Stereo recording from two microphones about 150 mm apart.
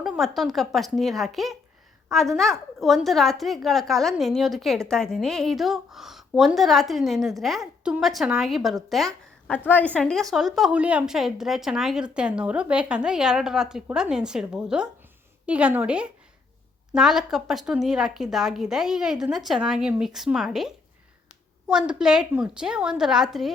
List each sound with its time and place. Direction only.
0.0 s a woman's voice: centre (ahead or behind)